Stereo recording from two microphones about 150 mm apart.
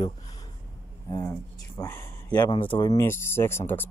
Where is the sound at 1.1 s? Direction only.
20° left (ahead or behind).